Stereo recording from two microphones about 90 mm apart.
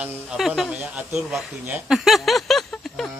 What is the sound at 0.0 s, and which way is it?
Speech, 15° right (ahead or behind).